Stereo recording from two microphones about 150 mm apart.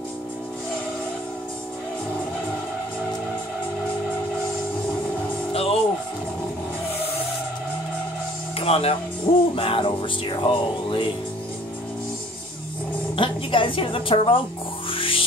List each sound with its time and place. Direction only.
5.5 s music: 40° left (ahead or behind)
8.5 s music: 40° left (ahead or behind)
9.3 s music: 60° left (ahead or behind)
9.6 s music: 35° left (ahead or behind)
13.1 s a woman's voice: 35° left (ahead or behind)
14.9 s music: 35° left (ahead or behind)